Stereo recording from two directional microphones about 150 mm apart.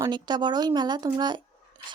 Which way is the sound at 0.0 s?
30° right (ahead or behind).